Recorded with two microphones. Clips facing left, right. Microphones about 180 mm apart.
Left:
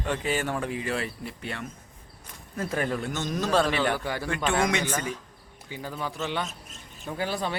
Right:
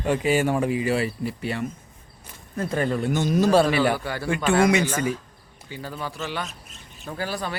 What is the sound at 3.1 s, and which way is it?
Speech, 10° right (ahead or behind).